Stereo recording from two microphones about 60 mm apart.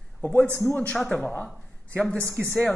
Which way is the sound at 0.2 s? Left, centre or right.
Left.